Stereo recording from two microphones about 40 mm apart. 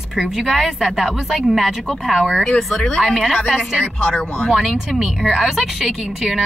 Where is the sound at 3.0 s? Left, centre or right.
Centre.